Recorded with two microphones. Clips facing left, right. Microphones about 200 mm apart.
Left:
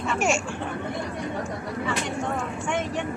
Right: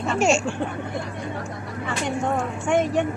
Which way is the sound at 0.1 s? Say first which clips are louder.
Right 5 dB; 25° right (ahead or behind).